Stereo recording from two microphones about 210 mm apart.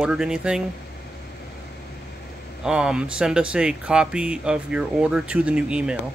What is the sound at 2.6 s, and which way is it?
Speech, 5° right (ahead or behind).